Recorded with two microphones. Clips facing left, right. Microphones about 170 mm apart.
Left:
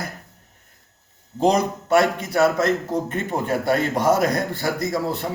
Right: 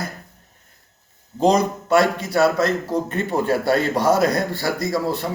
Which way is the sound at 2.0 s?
20° left (ahead or behind).